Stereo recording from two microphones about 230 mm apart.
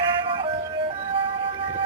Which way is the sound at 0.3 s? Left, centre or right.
Right.